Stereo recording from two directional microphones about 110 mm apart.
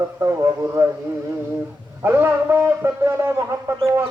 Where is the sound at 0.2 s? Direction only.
30° right (ahead or behind).